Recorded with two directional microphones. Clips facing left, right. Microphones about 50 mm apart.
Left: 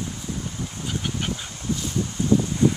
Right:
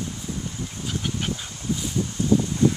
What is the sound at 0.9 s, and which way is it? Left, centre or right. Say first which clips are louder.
Duck: even; centre.